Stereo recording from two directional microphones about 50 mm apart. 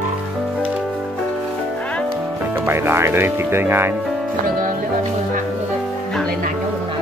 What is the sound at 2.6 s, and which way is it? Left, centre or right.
Speech, right.